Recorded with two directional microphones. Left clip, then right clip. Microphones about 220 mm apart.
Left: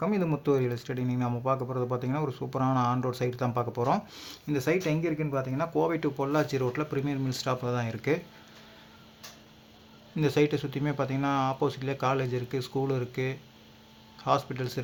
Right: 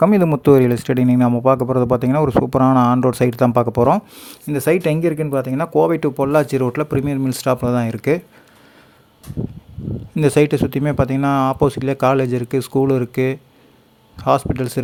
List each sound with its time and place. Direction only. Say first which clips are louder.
0.0 s speech: right 15 dB; 55° right (ahead or behind)
3.9 s speech: right 10 dB; 40° right (ahead or behind)
10.2 s speech: right 11 dB; 45° right (ahead or behind)